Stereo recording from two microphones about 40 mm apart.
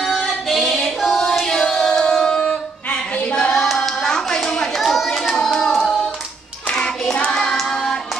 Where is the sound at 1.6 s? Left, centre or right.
Centre.